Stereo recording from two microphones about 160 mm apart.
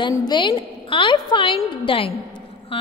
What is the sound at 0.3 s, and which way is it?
A woman's voice, 30° left (ahead or behind).